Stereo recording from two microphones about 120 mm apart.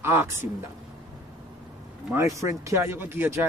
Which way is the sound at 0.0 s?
20° right (ahead or behind).